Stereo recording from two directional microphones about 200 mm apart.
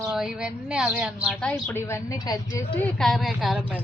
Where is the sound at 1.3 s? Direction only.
5° left (ahead or behind).